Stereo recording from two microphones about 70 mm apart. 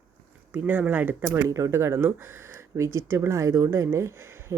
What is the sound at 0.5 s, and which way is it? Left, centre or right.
Speech, right.